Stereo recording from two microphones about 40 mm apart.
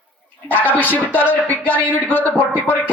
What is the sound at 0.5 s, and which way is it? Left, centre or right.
Speech, left.